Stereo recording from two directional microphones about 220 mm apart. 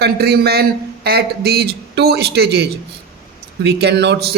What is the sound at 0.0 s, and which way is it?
Speech, 45° right (ahead or behind).